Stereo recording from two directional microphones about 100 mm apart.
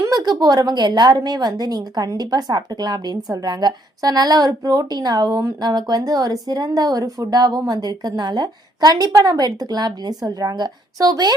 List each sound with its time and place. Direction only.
0.0 s a woman's voice: 45° right (ahead or behind)